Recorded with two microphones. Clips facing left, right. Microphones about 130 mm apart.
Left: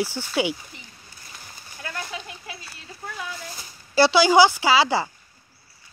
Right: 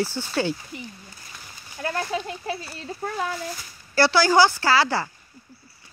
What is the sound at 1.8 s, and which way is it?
Speech, 40° right (ahead or behind).